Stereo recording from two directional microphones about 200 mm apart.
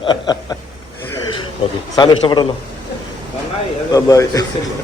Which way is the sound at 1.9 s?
20° left (ahead or behind).